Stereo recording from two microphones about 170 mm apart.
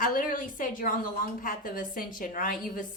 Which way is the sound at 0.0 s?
50° left (ahead or behind).